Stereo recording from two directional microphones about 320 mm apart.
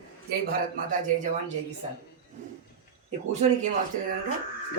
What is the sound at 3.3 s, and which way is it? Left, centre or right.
Speech, right.